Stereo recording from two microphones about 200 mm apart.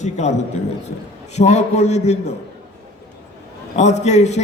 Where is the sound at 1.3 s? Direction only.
35° left (ahead or behind).